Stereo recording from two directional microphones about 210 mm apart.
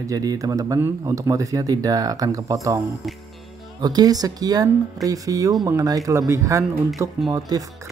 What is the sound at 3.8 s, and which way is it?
Speech, 20° right (ahead or behind).